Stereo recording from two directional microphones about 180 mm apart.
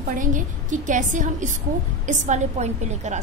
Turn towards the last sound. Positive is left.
turn(degrees=-40)  # may be behind; listen again after turning